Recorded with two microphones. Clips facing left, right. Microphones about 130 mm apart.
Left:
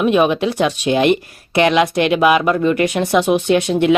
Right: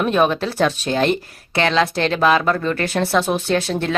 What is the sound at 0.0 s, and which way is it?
Speech, 10° left (ahead or behind).